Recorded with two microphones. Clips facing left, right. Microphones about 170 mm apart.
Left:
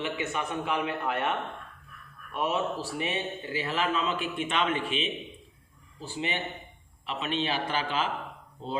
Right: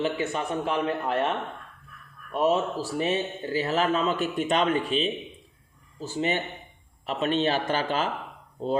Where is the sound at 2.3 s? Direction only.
40° right (ahead or behind).